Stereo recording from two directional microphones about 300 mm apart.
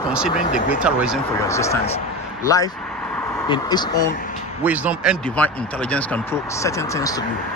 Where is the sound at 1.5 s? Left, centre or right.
Centre.